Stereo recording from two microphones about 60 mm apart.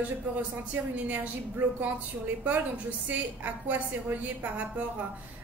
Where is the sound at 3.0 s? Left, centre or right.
Right.